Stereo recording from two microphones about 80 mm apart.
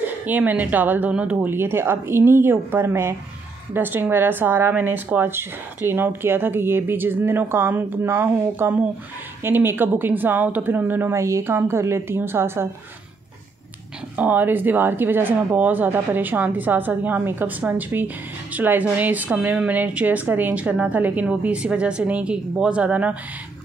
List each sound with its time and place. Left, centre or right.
0.0 s a woman's voice: right
11.1 s a woman's voice: right
14.1 s a woman's voice: right